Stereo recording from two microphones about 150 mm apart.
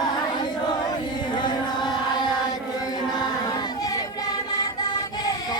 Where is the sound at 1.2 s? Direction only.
30° left (ahead or behind).